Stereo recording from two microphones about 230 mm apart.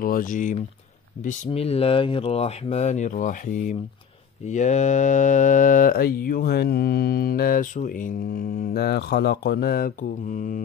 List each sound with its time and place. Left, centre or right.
0.0 s mantra: left
1.2 s speech: left
4.5 s mantra: left